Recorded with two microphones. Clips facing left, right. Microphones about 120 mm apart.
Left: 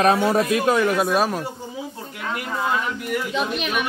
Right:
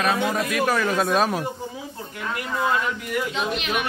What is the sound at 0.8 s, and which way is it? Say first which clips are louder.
Speech: left 1 dB; 5° left (ahead or behind).